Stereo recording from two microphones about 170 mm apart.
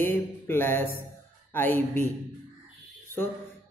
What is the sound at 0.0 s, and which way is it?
A man's voice, 15° left (ahead or behind).